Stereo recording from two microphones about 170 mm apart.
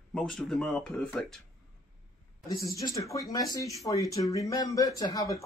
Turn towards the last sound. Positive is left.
turn(degrees=20)  # may be behind; listen again after turning